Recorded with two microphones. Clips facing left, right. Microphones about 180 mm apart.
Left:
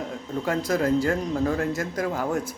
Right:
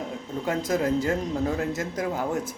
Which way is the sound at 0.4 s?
20° right (ahead or behind).